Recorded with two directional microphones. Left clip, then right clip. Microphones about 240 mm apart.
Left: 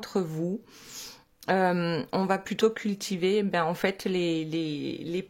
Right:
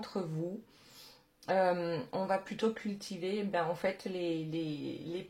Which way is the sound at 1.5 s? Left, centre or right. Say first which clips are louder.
Left 5 dB; left.